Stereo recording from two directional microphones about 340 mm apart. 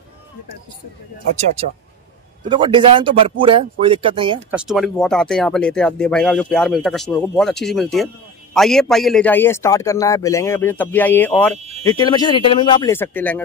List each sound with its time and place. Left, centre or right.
2.5 s speech: centre
4.6 s speech: centre
11.5 s a sound: centre
11.8 s speech: centre